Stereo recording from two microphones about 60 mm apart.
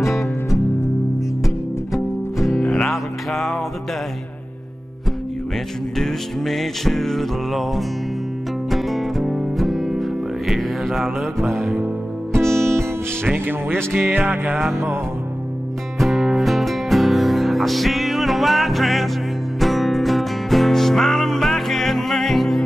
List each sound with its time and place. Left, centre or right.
2.3 s music: centre
5.9 s music: centre
12.3 s music: right
13.9 s music: right
14.7 s music: right
16.0 s music: centre